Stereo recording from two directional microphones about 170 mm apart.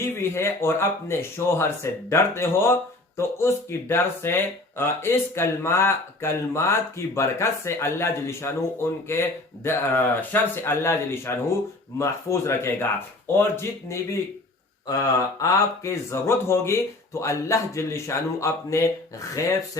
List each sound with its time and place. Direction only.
0.0 s speech: 15° left (ahead or behind)